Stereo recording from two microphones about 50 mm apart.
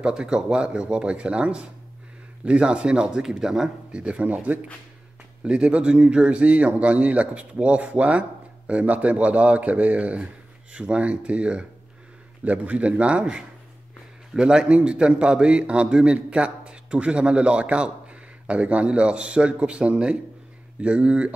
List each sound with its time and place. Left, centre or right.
0.0 s a man's voice: centre
3.9 s a man's voice: right